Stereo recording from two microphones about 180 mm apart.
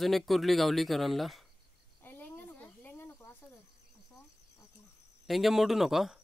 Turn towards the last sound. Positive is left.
turn(degrees=0)  # may be behind; listen again after turning